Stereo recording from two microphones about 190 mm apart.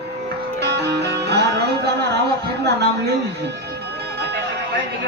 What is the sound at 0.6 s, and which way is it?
Music, 60° right (ahead or behind).